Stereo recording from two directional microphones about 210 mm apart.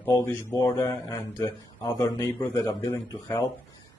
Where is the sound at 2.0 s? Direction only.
15° left (ahead or behind).